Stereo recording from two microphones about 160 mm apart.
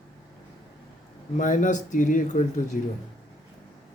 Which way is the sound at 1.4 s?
55° left (ahead or behind).